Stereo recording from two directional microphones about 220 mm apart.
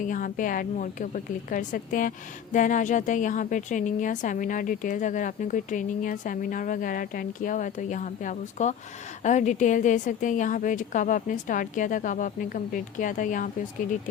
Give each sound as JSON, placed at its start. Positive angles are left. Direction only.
{"t": 0.0, "sound": "a woman's voice", "side_deg": 35}